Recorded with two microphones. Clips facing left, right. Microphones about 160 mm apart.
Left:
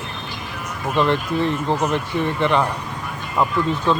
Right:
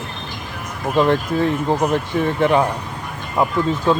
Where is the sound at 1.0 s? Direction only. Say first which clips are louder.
Right 3 dB; 10° right (ahead or behind).